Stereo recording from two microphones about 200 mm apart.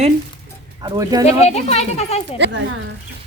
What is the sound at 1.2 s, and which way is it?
Speech, 35° left (ahead or behind).